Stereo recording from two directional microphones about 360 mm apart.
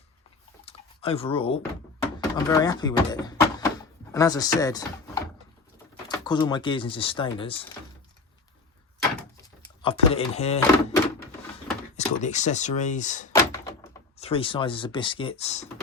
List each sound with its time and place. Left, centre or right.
0.6 s a sound: centre
2.3 s speech: centre
6.1 s speech: centre
9.6 s speech: centre
13.3 s door: centre
14.2 s speech: centre